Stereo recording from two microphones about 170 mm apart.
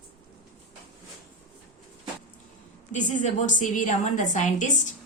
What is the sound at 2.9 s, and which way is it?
A woman's voice, 45° left (ahead or behind).